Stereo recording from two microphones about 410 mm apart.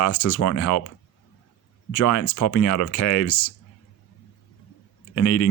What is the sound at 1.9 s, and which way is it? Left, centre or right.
Speech, left.